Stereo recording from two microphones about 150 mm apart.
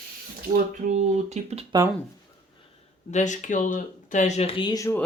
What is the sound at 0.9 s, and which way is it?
Speech, 50° right (ahead or behind).